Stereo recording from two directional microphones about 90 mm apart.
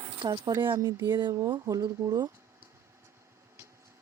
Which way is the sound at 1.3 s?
50° right (ahead or behind).